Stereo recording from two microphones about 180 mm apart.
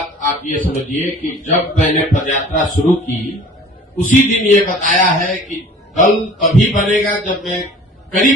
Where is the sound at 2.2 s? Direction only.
45° left (ahead or behind).